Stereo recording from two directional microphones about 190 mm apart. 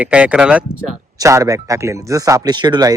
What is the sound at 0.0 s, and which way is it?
Speech, 5° right (ahead or behind).